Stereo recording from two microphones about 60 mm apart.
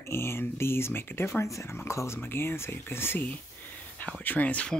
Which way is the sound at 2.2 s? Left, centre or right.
Left.